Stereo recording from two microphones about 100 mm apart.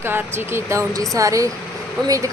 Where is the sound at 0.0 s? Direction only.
25° right (ahead or behind).